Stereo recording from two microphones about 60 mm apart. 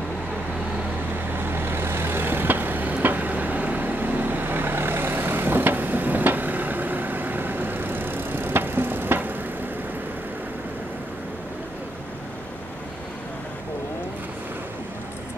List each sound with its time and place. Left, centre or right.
1.3 s vehicle: right